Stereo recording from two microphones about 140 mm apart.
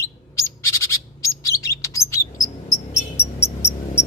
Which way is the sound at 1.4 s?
20° left (ahead or behind).